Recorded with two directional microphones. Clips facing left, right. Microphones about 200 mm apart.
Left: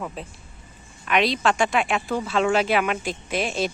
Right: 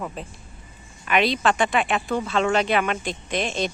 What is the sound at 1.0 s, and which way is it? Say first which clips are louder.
Speech: even; centre (ahead or behind).